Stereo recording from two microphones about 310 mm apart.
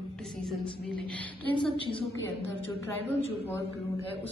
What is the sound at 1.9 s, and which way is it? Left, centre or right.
A woman's voice, centre.